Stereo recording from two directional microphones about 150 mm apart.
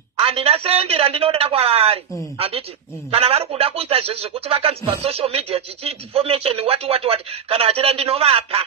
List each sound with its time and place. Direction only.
0.2 s speech: 40° right (ahead or behind)